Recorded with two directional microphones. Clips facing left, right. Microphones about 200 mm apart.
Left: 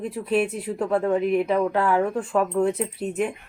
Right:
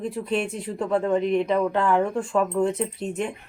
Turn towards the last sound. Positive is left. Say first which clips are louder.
# left 2 dB
turn(degrees=5)  # may be behind; listen again after turning